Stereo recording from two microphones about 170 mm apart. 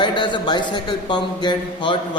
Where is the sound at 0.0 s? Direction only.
25° left (ahead or behind).